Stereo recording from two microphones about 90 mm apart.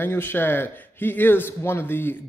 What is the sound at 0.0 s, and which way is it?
A man's voice, 25° left (ahead or behind).